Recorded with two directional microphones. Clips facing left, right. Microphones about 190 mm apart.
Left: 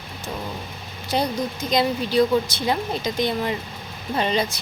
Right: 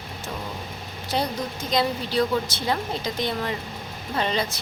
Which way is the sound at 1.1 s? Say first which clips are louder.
Left 3 dB; 15° left (ahead or behind).